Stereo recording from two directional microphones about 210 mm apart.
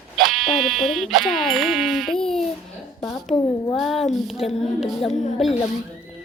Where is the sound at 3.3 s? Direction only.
15° left (ahead or behind).